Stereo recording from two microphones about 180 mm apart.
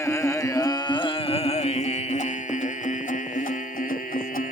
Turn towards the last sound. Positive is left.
turn(degrees=45)  # may be behind; listen again after turning